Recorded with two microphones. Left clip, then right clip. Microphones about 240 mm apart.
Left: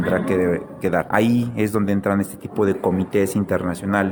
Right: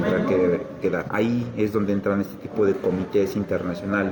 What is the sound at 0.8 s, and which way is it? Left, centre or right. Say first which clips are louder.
Speech: left 4 dB; left.